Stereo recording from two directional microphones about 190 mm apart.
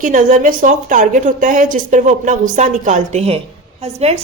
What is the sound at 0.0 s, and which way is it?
A woman's voice, 45° right (ahead or behind).